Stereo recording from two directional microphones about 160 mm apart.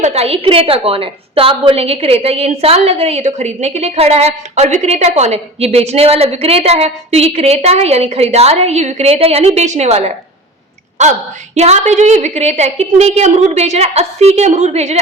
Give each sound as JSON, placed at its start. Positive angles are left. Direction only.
{"t": 0.0, "sound": "a woman's voice", "side_deg": -40}